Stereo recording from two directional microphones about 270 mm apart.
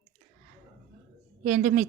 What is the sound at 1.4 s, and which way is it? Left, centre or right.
Speech, right.